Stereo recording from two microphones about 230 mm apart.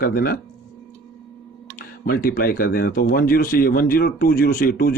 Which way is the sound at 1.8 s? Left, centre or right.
Left.